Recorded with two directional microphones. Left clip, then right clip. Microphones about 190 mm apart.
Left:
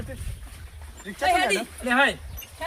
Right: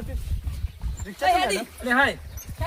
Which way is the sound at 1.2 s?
5° right (ahead or behind).